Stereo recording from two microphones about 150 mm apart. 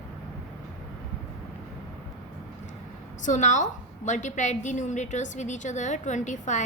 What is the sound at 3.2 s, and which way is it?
A woman's voice, 55° left (ahead or behind).